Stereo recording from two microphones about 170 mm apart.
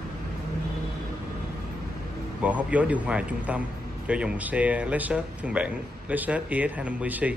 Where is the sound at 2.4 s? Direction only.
10° right (ahead or behind).